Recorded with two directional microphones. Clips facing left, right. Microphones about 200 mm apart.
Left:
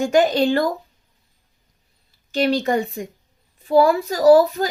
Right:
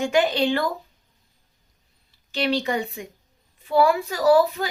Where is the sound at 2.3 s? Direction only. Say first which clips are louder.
Left 5 dB; 45° left (ahead or behind).